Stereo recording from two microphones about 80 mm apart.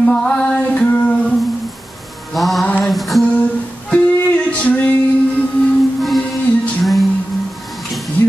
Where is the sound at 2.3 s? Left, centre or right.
Centre.